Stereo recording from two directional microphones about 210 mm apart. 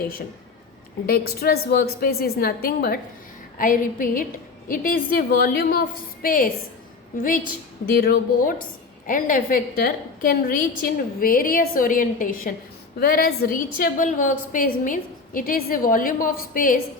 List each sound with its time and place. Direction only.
1.0 s a woman's voice: 45° left (ahead or behind)